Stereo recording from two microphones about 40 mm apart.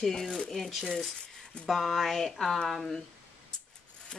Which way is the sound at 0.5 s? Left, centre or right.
Centre.